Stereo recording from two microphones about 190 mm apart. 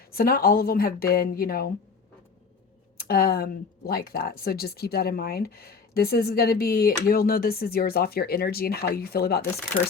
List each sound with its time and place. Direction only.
0.1 s speech: 50° left (ahead or behind)
3.0 s speech: 50° left (ahead or behind)